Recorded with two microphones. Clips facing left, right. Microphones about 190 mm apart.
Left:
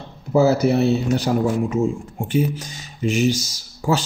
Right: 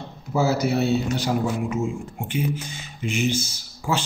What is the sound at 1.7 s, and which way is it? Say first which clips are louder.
Speech: left 5 dB; 40° left (ahead or behind).